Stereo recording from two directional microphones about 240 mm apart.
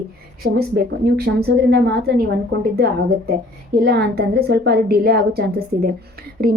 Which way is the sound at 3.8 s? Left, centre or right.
Right.